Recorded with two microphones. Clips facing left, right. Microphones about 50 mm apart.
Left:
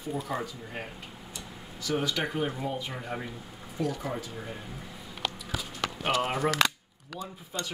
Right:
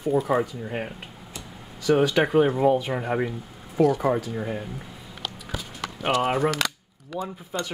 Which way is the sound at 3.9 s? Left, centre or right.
Right.